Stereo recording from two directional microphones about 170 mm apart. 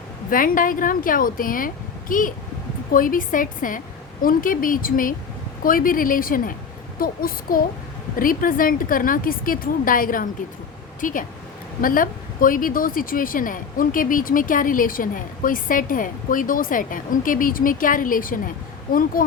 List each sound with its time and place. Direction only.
0.3 s a woman's voice: 55° left (ahead or behind)